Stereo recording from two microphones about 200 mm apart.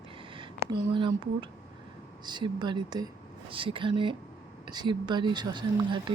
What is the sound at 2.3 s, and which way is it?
Speech, 20° right (ahead or behind).